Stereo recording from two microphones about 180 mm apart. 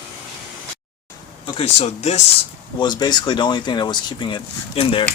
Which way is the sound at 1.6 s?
35° left (ahead or behind).